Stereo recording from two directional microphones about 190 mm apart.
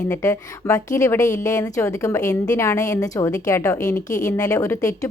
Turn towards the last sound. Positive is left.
turn(degrees=15)  # may be behind; listen again after turning